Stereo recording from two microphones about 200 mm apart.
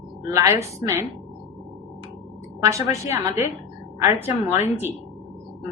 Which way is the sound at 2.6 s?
15° right (ahead or behind).